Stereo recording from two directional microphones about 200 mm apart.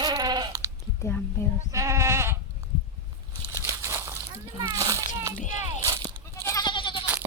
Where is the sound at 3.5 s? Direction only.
15° right (ahead or behind).